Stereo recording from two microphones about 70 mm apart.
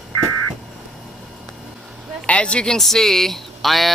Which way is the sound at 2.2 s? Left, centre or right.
Centre.